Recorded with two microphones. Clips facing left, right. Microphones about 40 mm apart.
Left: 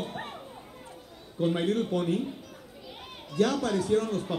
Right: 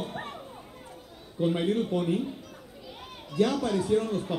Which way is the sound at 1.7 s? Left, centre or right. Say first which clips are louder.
Even; centre.